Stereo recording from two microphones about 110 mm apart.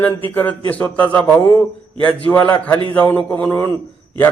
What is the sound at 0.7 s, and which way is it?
A man's voice, 15° left (ahead or behind).